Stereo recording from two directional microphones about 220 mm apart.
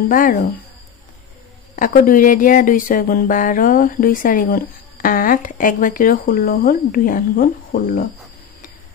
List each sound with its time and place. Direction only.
0.1 s speech: 40° left (ahead or behind)
1.8 s speech: 40° left (ahead or behind)